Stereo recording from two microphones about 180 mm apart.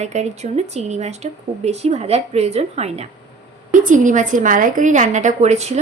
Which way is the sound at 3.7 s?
45° right (ahead or behind).